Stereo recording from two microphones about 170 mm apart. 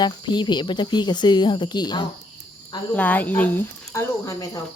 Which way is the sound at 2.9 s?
10° left (ahead or behind).